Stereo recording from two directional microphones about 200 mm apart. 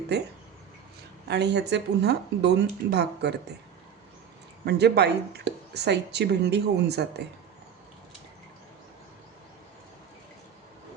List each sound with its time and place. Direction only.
0.1 s speech: 55° right (ahead or behind)
1.3 s speech: 60° right (ahead or behind)
4.6 s speech: 55° right (ahead or behind)